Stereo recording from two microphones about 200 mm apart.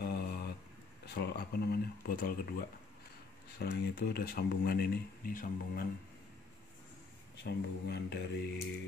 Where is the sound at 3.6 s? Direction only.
50° left (ahead or behind).